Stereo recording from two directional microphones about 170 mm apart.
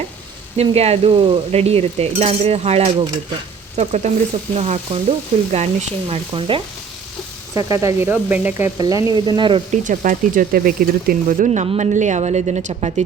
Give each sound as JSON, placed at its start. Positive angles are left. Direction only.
{"t": 0.5, "sound": "stir", "side_deg": -35}
{"t": 3.8, "sound": "speech", "side_deg": -40}
{"t": 4.5, "sound": "stir", "side_deg": -40}
{"t": 7.5, "sound": "speech", "side_deg": -20}
{"t": 9.7, "sound": "speech", "side_deg": -50}